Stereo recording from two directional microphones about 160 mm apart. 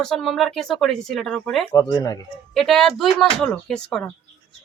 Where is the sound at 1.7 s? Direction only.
25° left (ahead or behind).